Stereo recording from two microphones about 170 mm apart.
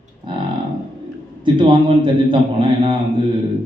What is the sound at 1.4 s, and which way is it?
Speech, 30° right (ahead or behind).